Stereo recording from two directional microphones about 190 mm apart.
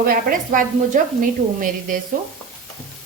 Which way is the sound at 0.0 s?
50° right (ahead or behind).